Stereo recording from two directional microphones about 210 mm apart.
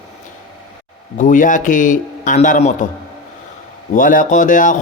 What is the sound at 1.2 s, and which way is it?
Speech, 35° left (ahead or behind).